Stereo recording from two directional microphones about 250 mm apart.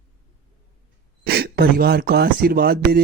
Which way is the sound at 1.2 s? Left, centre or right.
Right.